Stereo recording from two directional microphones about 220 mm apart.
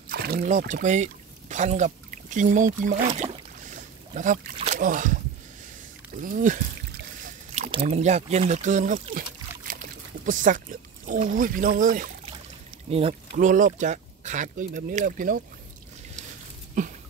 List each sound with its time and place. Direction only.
0.1 s speech: 45° right (ahead or behind)
3.1 s boat: 30° right (ahead or behind)
6.2 s speech: 35° right (ahead or behind)
13.4 s speech: 35° right (ahead or behind)
16.8 s a sound: 35° right (ahead or behind)